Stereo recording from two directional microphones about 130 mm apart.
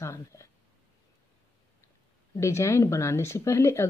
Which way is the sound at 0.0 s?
20° left (ahead or behind).